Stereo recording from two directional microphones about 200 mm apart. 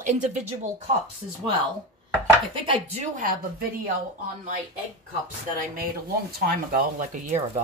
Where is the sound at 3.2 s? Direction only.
45° right (ahead or behind).